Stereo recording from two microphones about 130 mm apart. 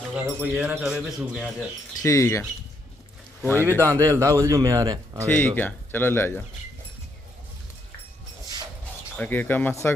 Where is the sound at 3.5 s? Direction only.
15° left (ahead or behind).